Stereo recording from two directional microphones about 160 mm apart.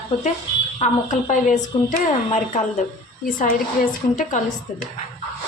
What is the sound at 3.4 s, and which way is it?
A woman's voice, 60° left (ahead or behind).